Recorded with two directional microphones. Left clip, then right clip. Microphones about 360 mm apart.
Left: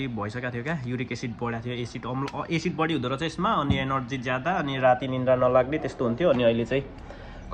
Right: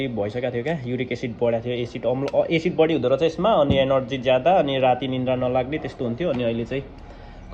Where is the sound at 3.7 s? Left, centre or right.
Centre.